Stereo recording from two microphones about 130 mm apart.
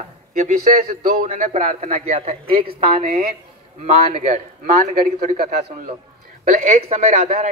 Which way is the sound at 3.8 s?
60° right (ahead or behind).